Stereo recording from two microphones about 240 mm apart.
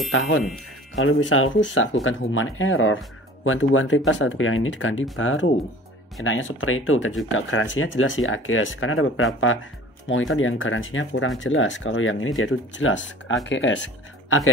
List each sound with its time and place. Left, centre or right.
0.9 s speech: left